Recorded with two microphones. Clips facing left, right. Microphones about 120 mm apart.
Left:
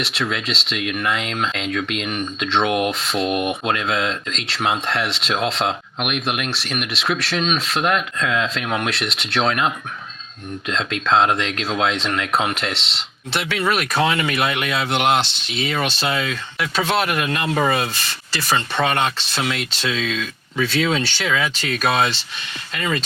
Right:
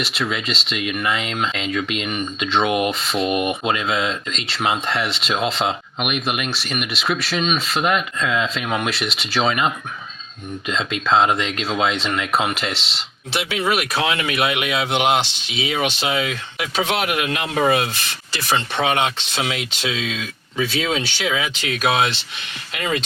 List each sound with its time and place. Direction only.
0.0 s speech: centre (ahead or behind)
13.3 s speech: 10° right (ahead or behind)